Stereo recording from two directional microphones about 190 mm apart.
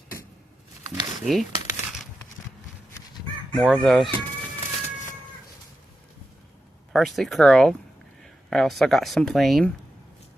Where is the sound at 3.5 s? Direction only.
Centre (ahead or behind).